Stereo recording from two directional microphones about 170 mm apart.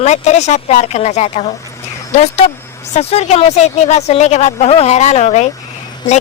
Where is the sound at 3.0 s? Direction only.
35° left (ahead or behind).